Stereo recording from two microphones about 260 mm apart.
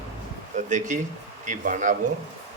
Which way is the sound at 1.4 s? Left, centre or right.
Right.